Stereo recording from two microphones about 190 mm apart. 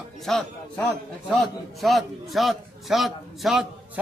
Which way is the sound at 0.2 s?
Centre (ahead or behind).